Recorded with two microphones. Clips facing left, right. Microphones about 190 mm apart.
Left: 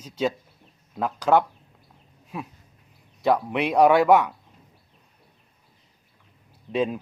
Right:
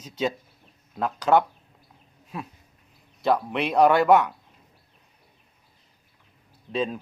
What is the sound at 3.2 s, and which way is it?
Speech, 10° left (ahead or behind).